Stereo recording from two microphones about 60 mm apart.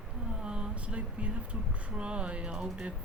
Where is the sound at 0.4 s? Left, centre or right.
Centre.